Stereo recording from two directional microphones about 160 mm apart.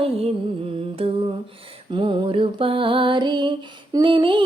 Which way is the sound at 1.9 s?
30° right (ahead or behind).